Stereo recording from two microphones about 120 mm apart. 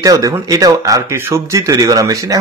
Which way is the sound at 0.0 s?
30° right (ahead or behind).